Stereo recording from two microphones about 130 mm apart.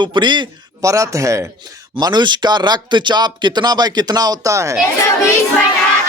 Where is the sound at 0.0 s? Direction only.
35° right (ahead or behind).